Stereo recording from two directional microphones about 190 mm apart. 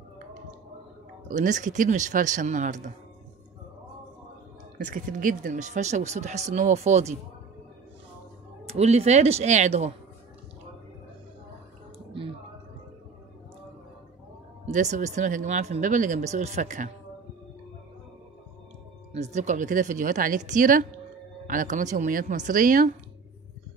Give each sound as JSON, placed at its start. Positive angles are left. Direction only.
{"t": 1.3, "sound": "speech", "side_deg": -40}
{"t": 4.8, "sound": "speech", "side_deg": -45}
{"t": 8.6, "sound": "speech", "side_deg": -35}
{"t": 14.7, "sound": "speech", "side_deg": -40}
{"t": 19.1, "sound": "speech", "side_deg": -35}